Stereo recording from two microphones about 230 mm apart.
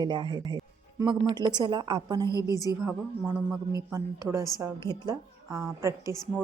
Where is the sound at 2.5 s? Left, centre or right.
Centre.